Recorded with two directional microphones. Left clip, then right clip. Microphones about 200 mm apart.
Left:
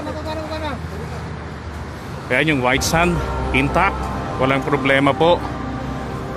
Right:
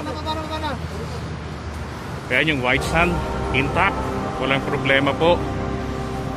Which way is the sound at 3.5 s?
35° left (ahead or behind).